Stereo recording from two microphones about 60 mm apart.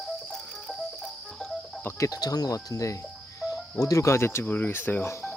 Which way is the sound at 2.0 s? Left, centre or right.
Left.